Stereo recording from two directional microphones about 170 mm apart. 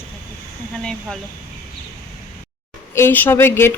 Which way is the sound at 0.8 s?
5° left (ahead or behind).